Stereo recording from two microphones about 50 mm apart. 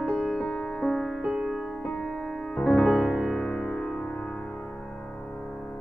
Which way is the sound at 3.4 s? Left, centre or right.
Centre.